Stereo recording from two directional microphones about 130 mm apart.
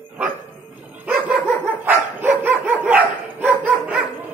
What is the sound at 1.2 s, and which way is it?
Dog, 10° right (ahead or behind).